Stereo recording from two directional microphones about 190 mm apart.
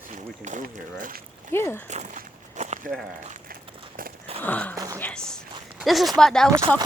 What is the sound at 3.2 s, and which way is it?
Run, 45° right (ahead or behind).